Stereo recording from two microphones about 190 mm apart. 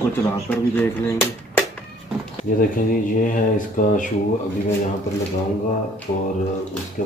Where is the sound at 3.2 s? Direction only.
45° left (ahead or behind).